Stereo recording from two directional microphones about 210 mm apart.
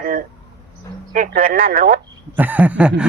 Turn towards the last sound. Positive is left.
turn(degrees=-5)  # may be behind; listen again after turning